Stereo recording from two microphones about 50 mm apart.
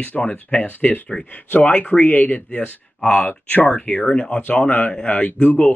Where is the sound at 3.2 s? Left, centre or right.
Left.